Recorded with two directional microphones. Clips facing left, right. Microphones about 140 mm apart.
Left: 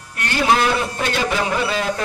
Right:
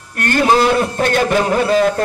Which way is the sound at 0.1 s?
50° right (ahead or behind).